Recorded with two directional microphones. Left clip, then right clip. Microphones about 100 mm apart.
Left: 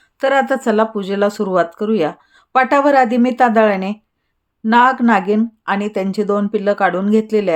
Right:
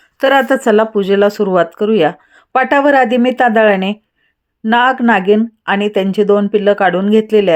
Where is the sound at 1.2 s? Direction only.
10° right (ahead or behind).